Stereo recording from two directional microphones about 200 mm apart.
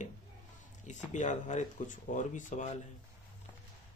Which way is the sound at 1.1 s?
35° left (ahead or behind).